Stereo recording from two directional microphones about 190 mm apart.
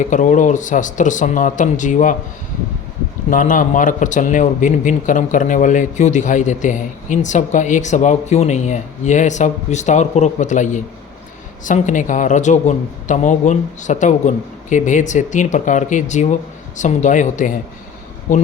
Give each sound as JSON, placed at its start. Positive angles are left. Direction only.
{"t": 0.0, "sound": "a man's voice", "side_deg": 40}
{"t": 3.2, "sound": "a man's voice", "side_deg": 45}